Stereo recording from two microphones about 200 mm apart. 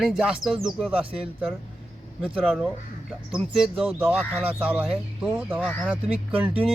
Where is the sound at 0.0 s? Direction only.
5° right (ahead or behind).